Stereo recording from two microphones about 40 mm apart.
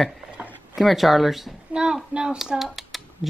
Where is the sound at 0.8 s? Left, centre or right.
Centre.